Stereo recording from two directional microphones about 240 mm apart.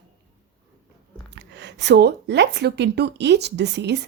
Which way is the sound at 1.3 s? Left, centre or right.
Right.